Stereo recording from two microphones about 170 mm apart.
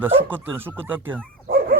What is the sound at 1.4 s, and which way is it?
Dog, 60° right (ahead or behind).